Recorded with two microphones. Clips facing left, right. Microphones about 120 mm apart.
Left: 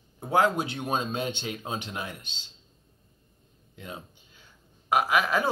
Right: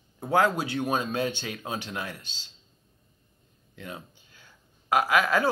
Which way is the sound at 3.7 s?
20° left (ahead or behind).